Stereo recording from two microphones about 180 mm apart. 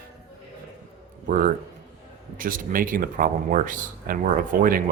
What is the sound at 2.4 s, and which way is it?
Speech, 50° right (ahead or behind).